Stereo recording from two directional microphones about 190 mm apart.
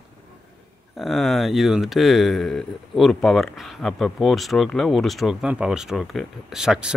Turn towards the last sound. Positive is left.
turn(degrees=-5)  # may be behind; listen again after turning